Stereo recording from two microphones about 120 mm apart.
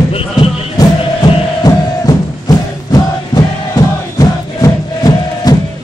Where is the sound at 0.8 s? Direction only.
30° left (ahead or behind).